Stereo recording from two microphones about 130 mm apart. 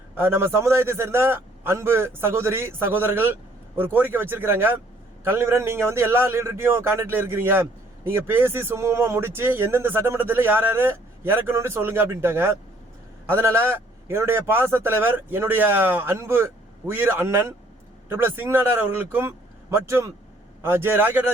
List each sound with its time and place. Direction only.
0.2 s a man's voice: 20° right (ahead or behind)